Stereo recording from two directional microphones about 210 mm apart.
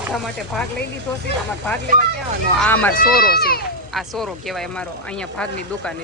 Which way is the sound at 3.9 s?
Centre (ahead or behind).